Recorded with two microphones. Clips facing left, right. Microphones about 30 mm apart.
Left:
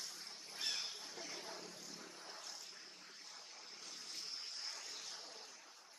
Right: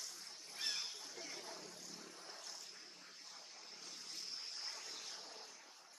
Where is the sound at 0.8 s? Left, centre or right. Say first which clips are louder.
Left 1 dB; centre.